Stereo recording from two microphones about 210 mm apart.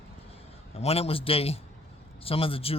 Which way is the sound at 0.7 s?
30° left (ahead or behind).